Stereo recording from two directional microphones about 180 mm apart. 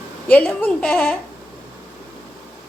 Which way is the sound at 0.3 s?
10° left (ahead or behind).